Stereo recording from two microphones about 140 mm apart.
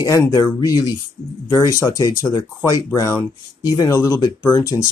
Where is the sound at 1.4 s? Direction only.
20° left (ahead or behind).